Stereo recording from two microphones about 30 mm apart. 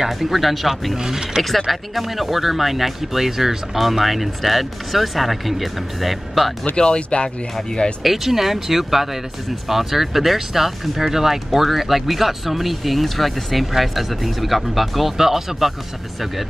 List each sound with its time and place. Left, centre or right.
0.3 s speech: centre
0.9 s speech: centre
1.7 s speech: centre
6.8 s speech: left
8.0 s speech: centre